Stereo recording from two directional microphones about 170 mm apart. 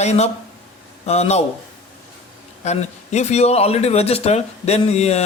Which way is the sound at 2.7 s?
40° left (ahead or behind).